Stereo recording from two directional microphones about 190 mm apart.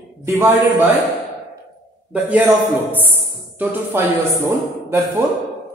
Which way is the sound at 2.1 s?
10° right (ahead or behind).